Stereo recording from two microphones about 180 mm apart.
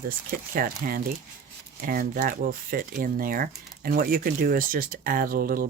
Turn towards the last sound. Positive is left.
turn(degrees=-50)  # may be behind; listen again after turning